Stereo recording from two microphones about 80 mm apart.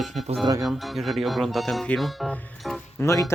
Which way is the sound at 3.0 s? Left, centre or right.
Left.